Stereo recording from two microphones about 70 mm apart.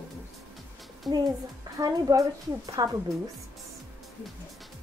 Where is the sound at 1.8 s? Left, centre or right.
Right.